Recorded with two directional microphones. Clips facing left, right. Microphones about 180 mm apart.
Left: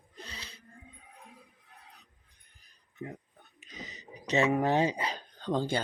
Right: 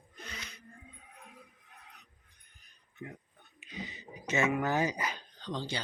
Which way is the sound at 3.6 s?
40° left (ahead or behind).